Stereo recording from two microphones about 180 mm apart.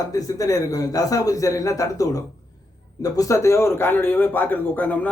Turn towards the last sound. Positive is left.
turn(degrees=10)  # may be behind; listen again after turning